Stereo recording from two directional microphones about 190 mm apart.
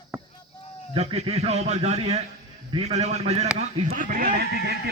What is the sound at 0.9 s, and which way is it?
A man's voice, 35° right (ahead or behind).